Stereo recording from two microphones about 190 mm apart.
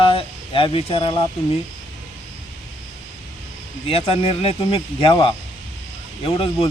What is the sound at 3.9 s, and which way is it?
Speech, 30° left (ahead or behind).